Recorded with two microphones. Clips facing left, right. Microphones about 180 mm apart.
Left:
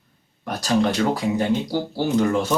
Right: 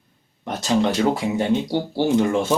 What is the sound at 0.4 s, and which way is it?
Speech, 20° right (ahead or behind).